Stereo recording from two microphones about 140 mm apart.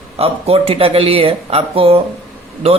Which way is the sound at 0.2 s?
45° right (ahead or behind).